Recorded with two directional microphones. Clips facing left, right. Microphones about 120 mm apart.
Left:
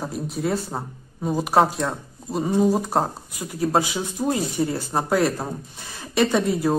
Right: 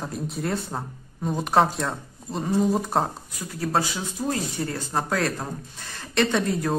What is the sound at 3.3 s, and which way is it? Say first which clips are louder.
Speech: left 4 dB; 15° left (ahead or behind).